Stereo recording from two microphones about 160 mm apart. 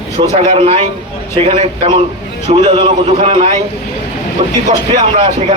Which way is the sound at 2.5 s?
30° right (ahead or behind).